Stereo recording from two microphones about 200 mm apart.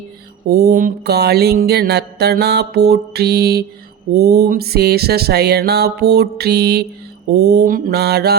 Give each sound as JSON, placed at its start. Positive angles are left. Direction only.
{"t": 0.4, "sound": "music", "side_deg": -50}